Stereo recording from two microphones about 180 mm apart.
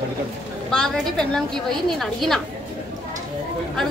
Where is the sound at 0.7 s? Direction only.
5° left (ahead or behind).